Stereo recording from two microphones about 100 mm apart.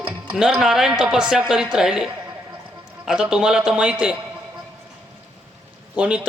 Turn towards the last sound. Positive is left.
turn(degrees=-10)  # may be behind; listen again after turning